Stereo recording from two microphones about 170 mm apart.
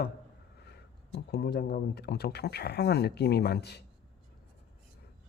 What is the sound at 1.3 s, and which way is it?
A man's voice, 75° left (ahead or behind).